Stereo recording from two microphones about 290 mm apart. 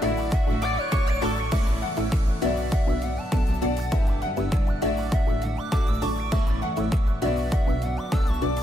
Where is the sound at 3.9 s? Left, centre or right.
Centre.